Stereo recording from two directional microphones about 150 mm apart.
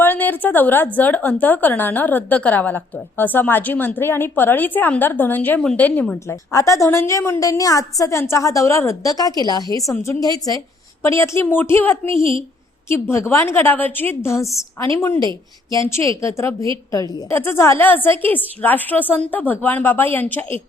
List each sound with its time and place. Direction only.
0.0 s a woman's voice: 10° left (ahead or behind)
12.1 s a woman's voice: 35° right (ahead or behind)
12.9 s a woman's voice: 15° left (ahead or behind)